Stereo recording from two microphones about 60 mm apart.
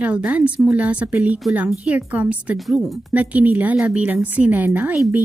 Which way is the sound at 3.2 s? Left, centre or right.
Right.